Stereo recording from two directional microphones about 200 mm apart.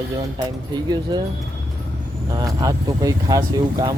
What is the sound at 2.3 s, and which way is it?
Speech, 15° right (ahead or behind).